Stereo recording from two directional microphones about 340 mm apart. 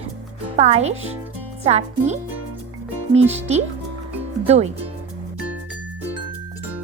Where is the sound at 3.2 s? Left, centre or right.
Centre.